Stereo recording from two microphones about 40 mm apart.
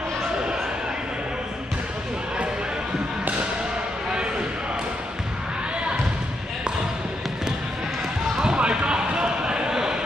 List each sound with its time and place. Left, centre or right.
8.5 s basketball bounce: right